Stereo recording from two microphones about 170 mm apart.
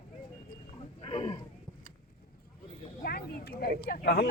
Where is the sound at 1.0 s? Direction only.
35° left (ahead or behind).